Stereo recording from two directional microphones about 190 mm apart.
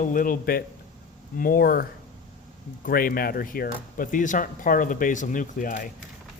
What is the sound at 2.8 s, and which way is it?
Speech, 50° left (ahead or behind).